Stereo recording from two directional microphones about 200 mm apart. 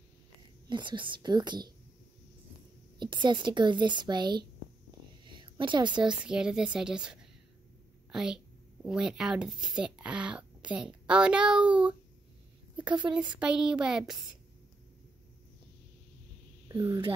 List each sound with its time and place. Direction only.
0.7 s speech: 25° right (ahead or behind)
3.0 s speech: 20° right (ahead or behind)
5.2 s a sound: 25° right (ahead or behind)
6.0 s a woman's voice: 5° right (ahead or behind)
12.7 s a woman's voice: 20° right (ahead or behind)
13.1 s speech: 5° right (ahead or behind)
16.6 s speech: 20° right (ahead or behind)